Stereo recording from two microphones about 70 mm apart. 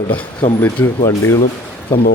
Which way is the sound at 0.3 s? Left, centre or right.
Left.